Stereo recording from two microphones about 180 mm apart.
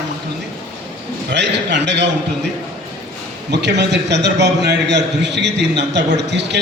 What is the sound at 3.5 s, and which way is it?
A man's voice, 70° right (ahead or behind).